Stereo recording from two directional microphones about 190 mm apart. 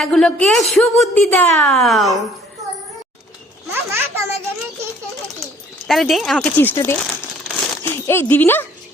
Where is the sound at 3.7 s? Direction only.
10° right (ahead or behind).